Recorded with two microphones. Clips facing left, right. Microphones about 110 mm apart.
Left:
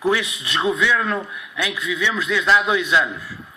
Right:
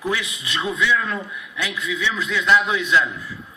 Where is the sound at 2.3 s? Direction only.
45° left (ahead or behind).